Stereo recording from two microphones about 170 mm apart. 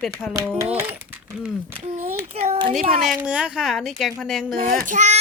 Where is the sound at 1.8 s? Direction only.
40° right (ahead or behind).